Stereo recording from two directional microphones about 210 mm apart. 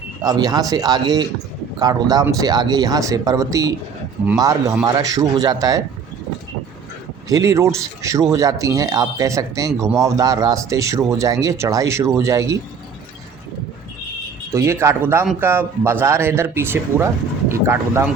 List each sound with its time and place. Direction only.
0.2 s a man's voice: 20° right (ahead or behind)
7.3 s a man's voice: 15° right (ahead or behind)
14.5 s a man's voice: 15° right (ahead or behind)